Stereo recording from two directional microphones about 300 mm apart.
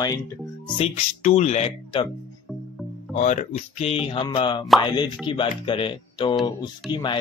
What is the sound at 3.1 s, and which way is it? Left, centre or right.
Speech, left.